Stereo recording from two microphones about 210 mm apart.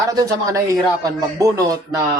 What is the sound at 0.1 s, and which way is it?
Speech, 15° right (ahead or behind).